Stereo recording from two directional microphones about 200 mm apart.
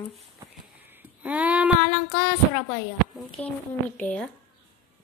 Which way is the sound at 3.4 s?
5° left (ahead or behind).